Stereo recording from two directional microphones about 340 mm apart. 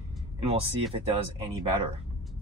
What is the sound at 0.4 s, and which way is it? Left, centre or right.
Speech, centre.